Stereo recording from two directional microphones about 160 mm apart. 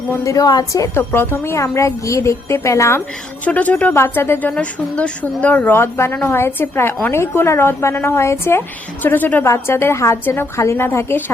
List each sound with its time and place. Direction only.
0.1 s a woman's voice: 20° left (ahead or behind)